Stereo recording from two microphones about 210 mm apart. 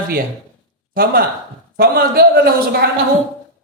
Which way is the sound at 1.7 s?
45° right (ahead or behind).